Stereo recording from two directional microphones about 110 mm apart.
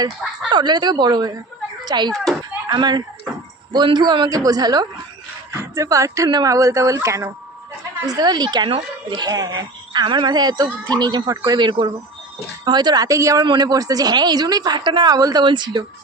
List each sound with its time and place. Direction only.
0.5 s a child's voice: 40° right (ahead or behind)
5.5 s speech: 25° right (ahead or behind)
13.4 s speech: 40° right (ahead or behind)